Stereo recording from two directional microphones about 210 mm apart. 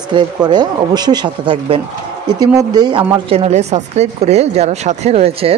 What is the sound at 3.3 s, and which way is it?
Speech, 30° right (ahead or behind).